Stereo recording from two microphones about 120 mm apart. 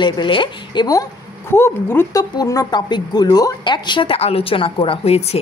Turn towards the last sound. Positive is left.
turn(degrees=55)  # may be behind; listen again after turning